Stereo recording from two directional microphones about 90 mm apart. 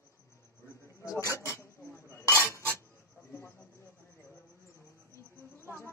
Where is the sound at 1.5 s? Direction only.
30° left (ahead or behind).